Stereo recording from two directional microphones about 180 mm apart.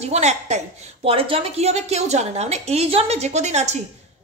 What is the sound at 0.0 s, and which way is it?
A woman's voice, 40° right (ahead or behind).